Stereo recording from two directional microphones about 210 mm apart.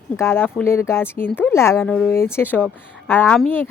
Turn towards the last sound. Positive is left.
turn(degrees=10)  # may be behind; listen again after turning